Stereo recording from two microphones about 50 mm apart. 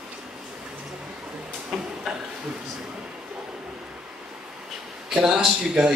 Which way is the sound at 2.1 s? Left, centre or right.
Centre.